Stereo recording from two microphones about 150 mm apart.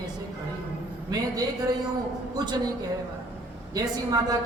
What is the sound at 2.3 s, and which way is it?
Speech, 25° right (ahead or behind).